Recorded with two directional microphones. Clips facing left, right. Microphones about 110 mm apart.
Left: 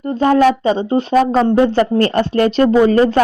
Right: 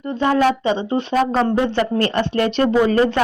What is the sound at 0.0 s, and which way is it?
Speech, 40° left (ahead or behind).